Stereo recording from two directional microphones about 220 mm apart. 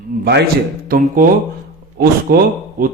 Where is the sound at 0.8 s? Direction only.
40° right (ahead or behind).